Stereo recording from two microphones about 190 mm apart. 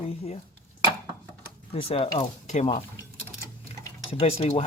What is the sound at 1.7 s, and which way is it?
Dishes, 30° left (ahead or behind).